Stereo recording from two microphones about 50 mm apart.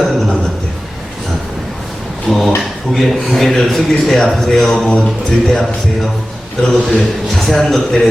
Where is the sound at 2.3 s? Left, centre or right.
Centre.